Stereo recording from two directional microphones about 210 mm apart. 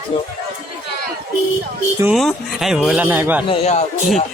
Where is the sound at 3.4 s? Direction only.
30° left (ahead or behind).